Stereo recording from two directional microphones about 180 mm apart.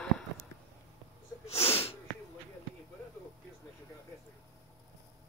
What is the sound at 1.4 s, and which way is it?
Sneeze, 35° left (ahead or behind).